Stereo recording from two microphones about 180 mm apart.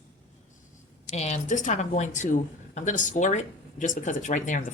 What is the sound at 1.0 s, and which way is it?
A woman's voice, 40° left (ahead or behind).